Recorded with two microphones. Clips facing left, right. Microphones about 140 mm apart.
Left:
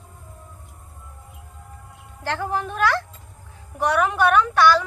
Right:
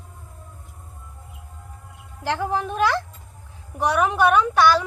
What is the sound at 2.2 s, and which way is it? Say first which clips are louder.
A woman's voice: right 2 dB; 15° right (ahead or behind).